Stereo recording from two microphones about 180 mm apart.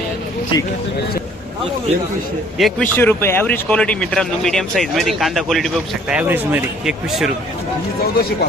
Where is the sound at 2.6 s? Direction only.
Centre (ahead or behind).